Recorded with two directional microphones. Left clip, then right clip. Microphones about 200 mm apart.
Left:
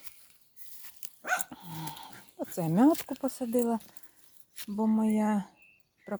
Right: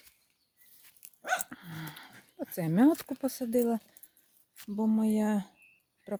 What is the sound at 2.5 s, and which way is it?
Speech, centre (ahead or behind).